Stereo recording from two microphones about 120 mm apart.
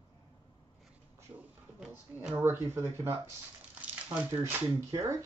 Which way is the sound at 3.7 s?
10° right (ahead or behind).